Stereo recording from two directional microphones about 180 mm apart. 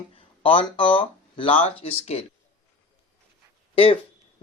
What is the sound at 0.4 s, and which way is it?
Speech, 30° left (ahead or behind).